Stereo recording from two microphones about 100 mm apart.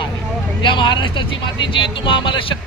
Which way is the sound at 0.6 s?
55° left (ahead or behind).